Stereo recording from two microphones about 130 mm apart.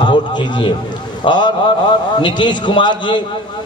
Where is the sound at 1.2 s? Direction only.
35° left (ahead or behind).